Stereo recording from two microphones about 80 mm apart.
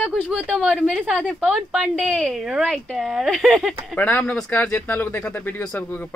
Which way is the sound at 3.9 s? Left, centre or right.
Left.